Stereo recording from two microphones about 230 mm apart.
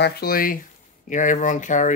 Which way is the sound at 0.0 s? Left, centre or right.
Left.